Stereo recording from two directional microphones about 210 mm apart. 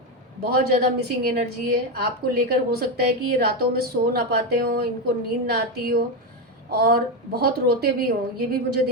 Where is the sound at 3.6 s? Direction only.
45° right (ahead or behind).